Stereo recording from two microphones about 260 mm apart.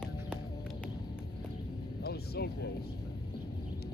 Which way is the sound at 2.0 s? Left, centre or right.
Left.